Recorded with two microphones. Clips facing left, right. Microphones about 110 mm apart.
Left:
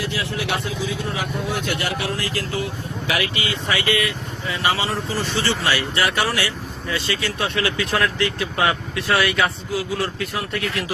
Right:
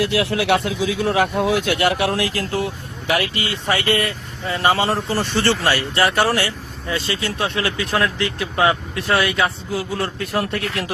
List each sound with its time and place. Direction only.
0.0 s speech: 70° right (ahead or behind); by 3.4 s 50° right (ahead or behind)
3.9 s speech: 35° right (ahead or behind)
4.5 s speech: 45° right (ahead or behind)
6.0 s speech: 35° right (ahead or behind)
10.3 s speech: 50° right (ahead or behind)